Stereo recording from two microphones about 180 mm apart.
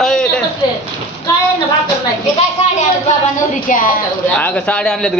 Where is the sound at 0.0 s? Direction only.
5° left (ahead or behind).